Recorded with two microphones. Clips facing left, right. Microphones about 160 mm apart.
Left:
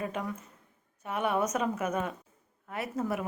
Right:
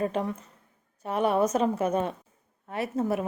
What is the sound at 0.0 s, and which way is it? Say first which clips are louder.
A woman's voice: right 6 dB; 30° right (ahead or behind).